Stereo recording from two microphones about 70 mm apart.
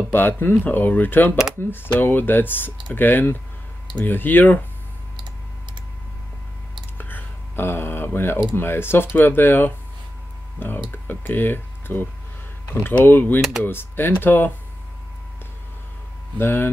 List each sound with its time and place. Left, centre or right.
0.1 s speech: left
7.0 s a sound: left
8.5 s speech: left
10.9 s speech: left
13.4 s speech: centre
13.7 s speech: left
16.3 s speech: left